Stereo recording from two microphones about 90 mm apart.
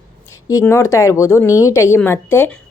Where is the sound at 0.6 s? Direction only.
30° left (ahead or behind).